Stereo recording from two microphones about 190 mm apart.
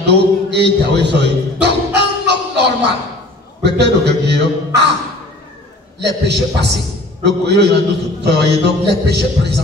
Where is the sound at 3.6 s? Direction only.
65° right (ahead or behind).